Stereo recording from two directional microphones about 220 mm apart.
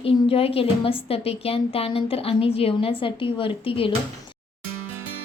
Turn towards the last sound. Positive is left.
turn(degrees=25)  # may be behind; listen again after turning